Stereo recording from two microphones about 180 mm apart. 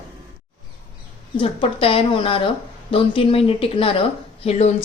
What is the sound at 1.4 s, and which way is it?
A woman's voice, 30° left (ahead or behind).